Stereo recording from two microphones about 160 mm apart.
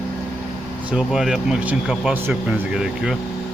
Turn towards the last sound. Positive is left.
turn(degrees=-5)  # may be behind; listen again after turning